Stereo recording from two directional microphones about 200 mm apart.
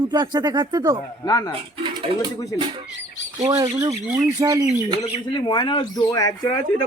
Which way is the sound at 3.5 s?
20° right (ahead or behind).